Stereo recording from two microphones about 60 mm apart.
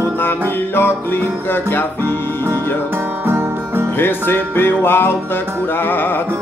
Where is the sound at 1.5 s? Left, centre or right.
Left.